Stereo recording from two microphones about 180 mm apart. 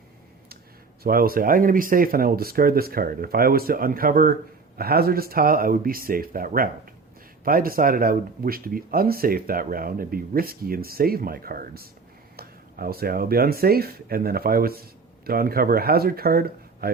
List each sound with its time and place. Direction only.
1.0 s speech: 55° right (ahead or behind)